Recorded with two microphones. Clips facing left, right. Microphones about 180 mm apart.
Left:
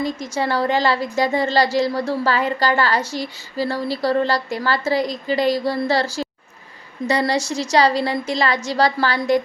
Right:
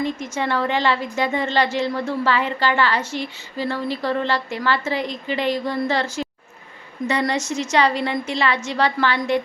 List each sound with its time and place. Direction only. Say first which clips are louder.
0.0 s a woman's voice: left 1 dB; 35° left (ahead or behind)